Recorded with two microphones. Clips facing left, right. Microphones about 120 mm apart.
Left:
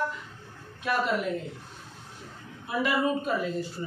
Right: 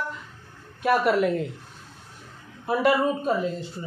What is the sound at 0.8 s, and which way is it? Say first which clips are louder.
Speech: right 7 dB; 60° right (ahead or behind).